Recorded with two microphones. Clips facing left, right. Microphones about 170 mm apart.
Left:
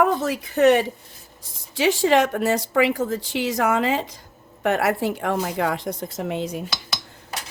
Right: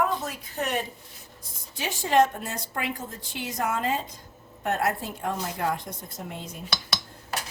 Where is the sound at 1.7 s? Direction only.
90° left.